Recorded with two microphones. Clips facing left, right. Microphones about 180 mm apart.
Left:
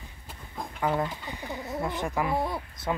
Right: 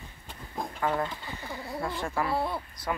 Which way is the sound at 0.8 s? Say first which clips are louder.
Left 2 dB; 15° left (ahead or behind).